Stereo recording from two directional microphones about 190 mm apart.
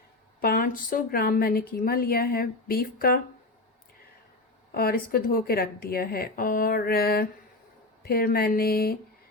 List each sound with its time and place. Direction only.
0.4 s speech: 50° left (ahead or behind)
4.7 s speech: 50° left (ahead or behind)